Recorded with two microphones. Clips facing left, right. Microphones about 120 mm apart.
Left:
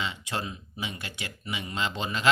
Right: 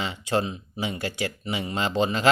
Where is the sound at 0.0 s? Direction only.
35° right (ahead or behind).